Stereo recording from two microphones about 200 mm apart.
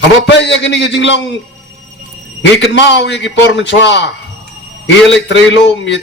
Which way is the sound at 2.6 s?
65° left (ahead or behind).